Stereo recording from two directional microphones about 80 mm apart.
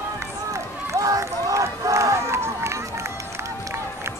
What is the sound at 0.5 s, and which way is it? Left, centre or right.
Run, right.